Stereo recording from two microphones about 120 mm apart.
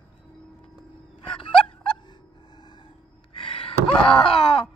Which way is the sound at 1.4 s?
5° left (ahead or behind).